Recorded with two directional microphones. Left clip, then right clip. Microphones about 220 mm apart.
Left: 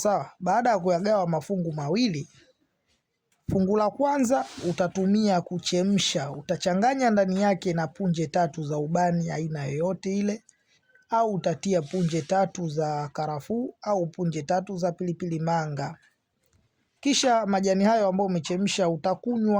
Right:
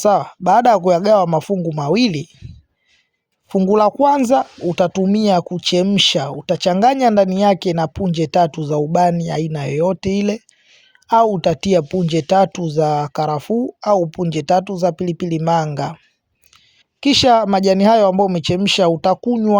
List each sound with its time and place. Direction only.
0.0 s speech: 35° right (ahead or behind)
3.4 s speech: 30° right (ahead or behind)
17.0 s speech: 30° right (ahead or behind)